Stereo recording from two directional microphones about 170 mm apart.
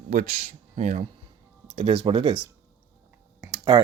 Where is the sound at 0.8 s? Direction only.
45° right (ahead or behind).